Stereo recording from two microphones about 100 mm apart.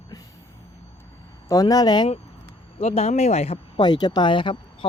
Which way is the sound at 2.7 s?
85° left.